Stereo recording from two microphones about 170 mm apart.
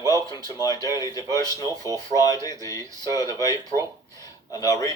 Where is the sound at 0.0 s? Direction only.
20° right (ahead or behind).